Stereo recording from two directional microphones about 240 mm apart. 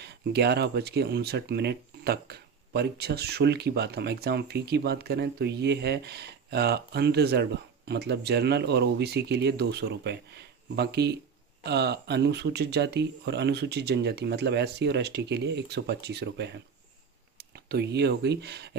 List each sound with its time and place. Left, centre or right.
0.0 s speech: right